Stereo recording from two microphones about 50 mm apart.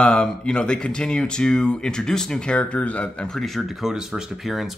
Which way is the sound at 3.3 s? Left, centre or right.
Centre.